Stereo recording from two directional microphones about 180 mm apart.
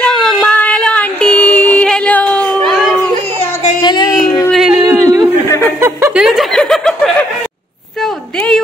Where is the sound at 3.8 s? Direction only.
25° left (ahead or behind).